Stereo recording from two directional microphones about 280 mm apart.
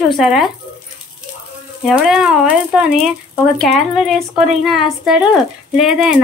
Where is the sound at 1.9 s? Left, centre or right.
Centre.